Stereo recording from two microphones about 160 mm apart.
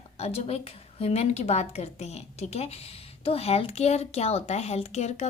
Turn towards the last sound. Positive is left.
turn(degrees=45)  # may be behind; listen again after turning